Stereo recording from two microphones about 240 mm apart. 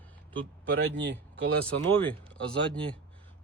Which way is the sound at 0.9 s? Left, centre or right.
Right.